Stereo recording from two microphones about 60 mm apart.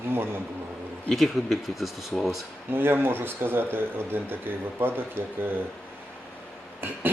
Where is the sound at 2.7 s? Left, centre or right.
Right.